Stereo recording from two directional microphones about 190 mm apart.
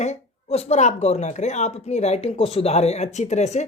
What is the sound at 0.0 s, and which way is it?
Speech, 35° left (ahead or behind).